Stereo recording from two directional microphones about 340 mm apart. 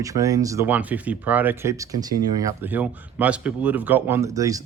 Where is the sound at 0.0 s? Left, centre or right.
Centre.